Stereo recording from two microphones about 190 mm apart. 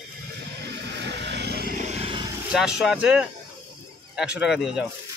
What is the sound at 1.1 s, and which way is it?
Vehicle, 65° right (ahead or behind).